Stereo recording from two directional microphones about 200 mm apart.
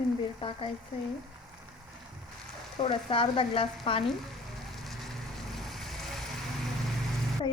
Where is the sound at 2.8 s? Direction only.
25° left (ahead or behind).